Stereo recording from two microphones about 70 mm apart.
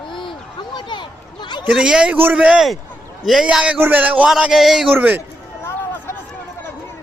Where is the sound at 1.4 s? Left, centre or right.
Left.